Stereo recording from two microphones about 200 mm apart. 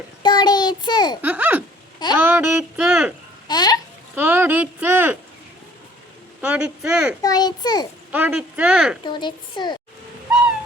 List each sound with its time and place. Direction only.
0.2 s child singing: 20° left (ahead or behind)
1.2 s a sound: 5° right (ahead or behind)
2.1 s speech: 10° right (ahead or behind)
3.4 s a child's voice: 20° left (ahead or behind)
4.1 s speech: 10° right (ahead or behind)
6.4 s speech: 5° right (ahead or behind)
7.2 s a child's voice: 20° left (ahead or behind)
8.1 s speech: 10° right (ahead or behind)
9.0 s a child's voice: 20° left (ahead or behind)